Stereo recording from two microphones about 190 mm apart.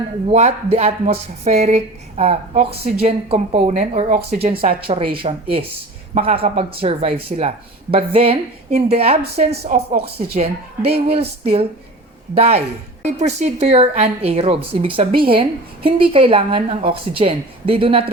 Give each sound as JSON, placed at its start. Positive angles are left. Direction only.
{"t": 0.3, "sound": "speech", "side_deg": -35}
{"t": 4.5, "sound": "speech", "side_deg": -50}
{"t": 5.1, "sound": "a woman's voice", "side_deg": -30}
{"t": 12.3, "sound": "a woman's voice", "side_deg": -35}